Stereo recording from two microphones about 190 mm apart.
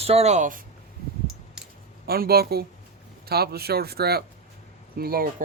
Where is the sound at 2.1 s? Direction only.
55° right (ahead or behind).